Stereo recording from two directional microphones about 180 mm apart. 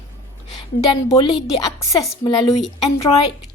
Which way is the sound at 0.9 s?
25° left (ahead or behind).